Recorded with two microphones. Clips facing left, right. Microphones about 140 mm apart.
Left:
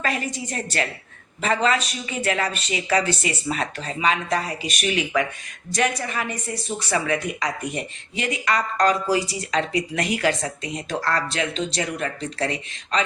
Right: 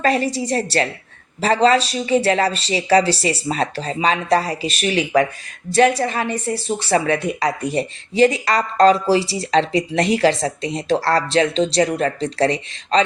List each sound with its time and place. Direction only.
0.0 s speech: 35° right (ahead or behind)